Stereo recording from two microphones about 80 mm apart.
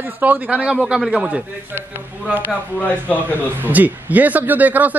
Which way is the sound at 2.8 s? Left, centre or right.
Centre.